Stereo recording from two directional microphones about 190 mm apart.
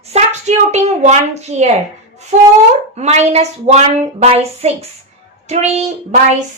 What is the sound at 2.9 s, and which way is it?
A child's voice, 35° right (ahead or behind).